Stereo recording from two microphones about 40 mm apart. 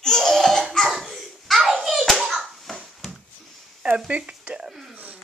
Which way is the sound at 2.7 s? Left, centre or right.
Centre.